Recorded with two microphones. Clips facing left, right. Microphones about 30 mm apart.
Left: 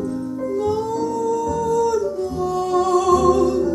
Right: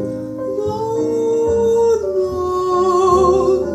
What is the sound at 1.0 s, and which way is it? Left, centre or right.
Music, right.